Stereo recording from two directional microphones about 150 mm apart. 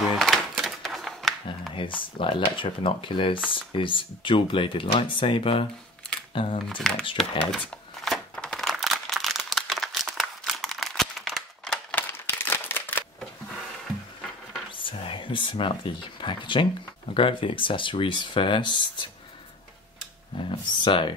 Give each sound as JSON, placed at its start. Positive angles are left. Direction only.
{"t": 0.1, "sound": "a sound", "side_deg": 0}
{"t": 1.8, "sound": "speech", "side_deg": 35}
{"t": 6.8, "sound": "speech", "side_deg": 5}
{"t": 7.2, "sound": "crumpling", "side_deg": 0}
{"t": 12.1, "sound": "a sound", "side_deg": 15}
{"t": 14.8, "sound": "speech", "side_deg": 35}
{"t": 20.3, "sound": "speech", "side_deg": 30}